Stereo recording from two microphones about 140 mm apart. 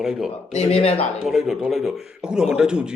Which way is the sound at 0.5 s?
50° left (ahead or behind).